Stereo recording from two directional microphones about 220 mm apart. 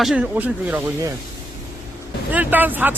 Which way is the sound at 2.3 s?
10° right (ahead or behind).